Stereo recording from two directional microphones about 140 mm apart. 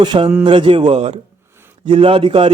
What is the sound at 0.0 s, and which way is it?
A man's voice, 30° right (ahead or behind).